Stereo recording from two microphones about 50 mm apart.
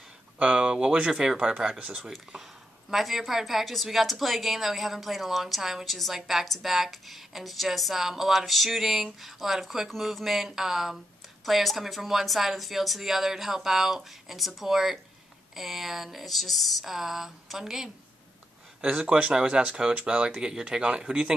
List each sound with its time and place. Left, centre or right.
0.4 s speech: right
2.3 s a woman's voice: centre
18.8 s speech: centre